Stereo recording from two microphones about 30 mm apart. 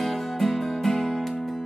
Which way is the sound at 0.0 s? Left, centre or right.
Centre.